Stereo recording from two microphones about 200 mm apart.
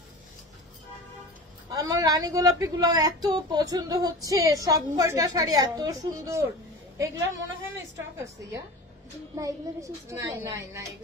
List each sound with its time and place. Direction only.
1.7 s speech: 20° right (ahead or behind)
7.3 s a woman's voice: 70° right (ahead or behind)
7.9 s speech: 15° right (ahead or behind)